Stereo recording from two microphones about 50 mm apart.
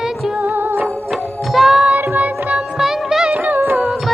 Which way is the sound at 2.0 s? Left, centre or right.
Right.